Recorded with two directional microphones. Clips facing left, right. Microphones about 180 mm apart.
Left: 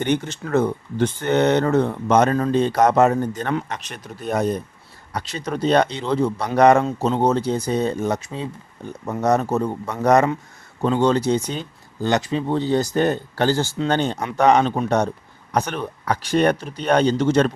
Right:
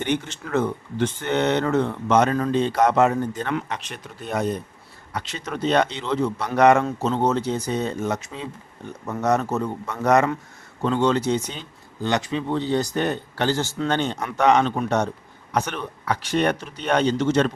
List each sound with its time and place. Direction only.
0.0 s speech: 40° left (ahead or behind)
6.8 s speech: 25° left (ahead or behind)
7.2 s speech: 35° left (ahead or behind)